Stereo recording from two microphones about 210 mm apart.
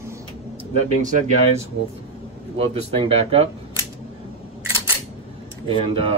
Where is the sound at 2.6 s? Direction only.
25° right (ahead or behind).